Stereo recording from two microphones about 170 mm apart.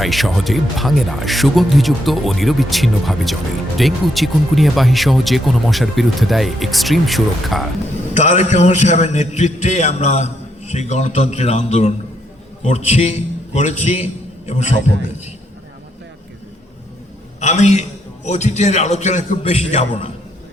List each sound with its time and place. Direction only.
0.0 s speech: centre (ahead or behind)
8.1 s a man's voice: 45° left (ahead or behind)
17.4 s a man's voice: 45° left (ahead or behind)